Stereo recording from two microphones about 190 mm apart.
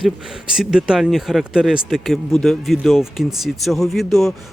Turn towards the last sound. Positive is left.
turn(degrees=0)  # may be behind; listen again after turning